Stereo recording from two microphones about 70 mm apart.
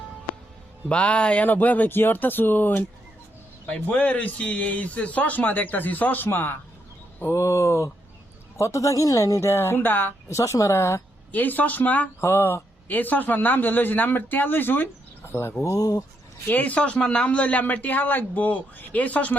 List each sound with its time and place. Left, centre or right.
0.9 s a man's voice: centre
7.3 s speech: left
10.2 s speech: left
11.3 s a man's voice: left
12.2 s speech: left
12.9 s a man's voice: left
16.5 s a man's voice: left